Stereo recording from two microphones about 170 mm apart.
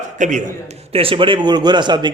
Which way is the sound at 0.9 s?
30° right (ahead or behind).